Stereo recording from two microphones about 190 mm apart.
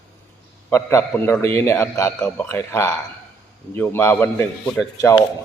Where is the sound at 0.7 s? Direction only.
15° left (ahead or behind).